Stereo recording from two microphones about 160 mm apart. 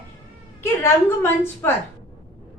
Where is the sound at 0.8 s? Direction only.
15° left (ahead or behind).